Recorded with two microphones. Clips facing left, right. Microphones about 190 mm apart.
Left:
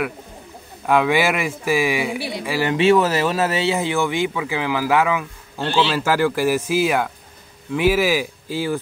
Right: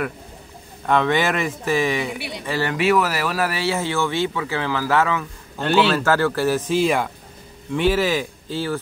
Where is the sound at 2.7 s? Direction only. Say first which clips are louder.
Left 4 dB; 25° left (ahead or behind).